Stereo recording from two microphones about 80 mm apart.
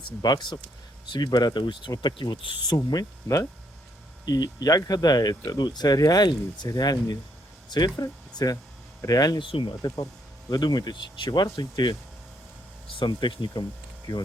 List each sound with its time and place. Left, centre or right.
0.0 s speech: left
2.7 s speech: left
8.0 s speech: left
9.4 s speech: left
10.5 s speech: left
12.9 s speech: left